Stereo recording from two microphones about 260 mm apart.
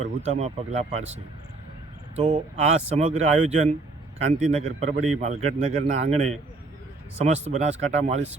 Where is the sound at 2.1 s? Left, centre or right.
Right.